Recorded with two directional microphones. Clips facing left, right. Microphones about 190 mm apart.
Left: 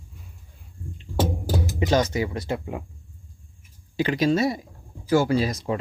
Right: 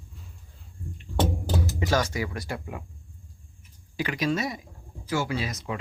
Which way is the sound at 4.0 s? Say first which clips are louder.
Left 6 dB; 30° left (ahead or behind).